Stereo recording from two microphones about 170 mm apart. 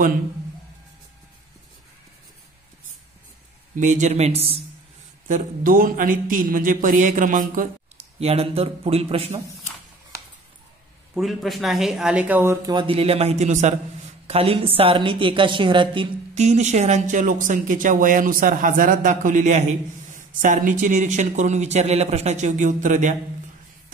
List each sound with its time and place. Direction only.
3.7 s a woman's voice: 45° right (ahead or behind)
5.3 s speech: 55° right (ahead or behind)
8.0 s a woman's voice: 35° right (ahead or behind)
11.1 s speech: centre (ahead or behind)
12.7 s a woman's voice: 35° right (ahead or behind)
16.3 s speech: 40° right (ahead or behind)